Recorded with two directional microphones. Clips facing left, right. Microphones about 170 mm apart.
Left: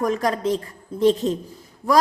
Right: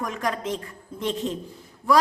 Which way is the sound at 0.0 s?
35° left (ahead or behind).